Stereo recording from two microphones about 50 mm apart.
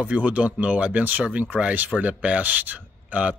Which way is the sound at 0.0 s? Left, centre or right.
Right.